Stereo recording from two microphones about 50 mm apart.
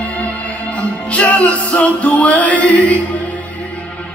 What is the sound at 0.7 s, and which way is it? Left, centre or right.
Music, left.